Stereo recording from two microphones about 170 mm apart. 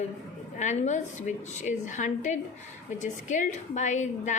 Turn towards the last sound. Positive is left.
turn(degrees=45)  # may be behind; listen again after turning